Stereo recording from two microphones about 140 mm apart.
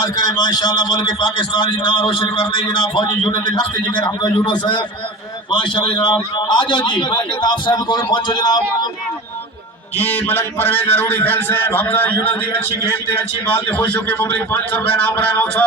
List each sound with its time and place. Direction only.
0.0 s a man's voice: 30° left (ahead or behind)
10.0 s a man's voice: 15° left (ahead or behind)